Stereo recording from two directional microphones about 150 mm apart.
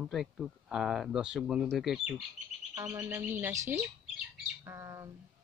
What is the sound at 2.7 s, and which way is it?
Speech, 15° right (ahead or behind).